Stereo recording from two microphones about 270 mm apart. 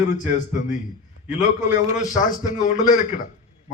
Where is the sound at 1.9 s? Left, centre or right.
Left.